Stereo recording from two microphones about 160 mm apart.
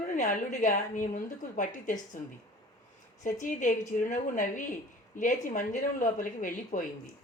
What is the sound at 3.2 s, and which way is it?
A woman's voice, 50° left (ahead or behind).